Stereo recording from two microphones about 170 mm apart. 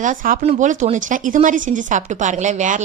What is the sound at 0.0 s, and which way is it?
Speech, 50° right (ahead or behind).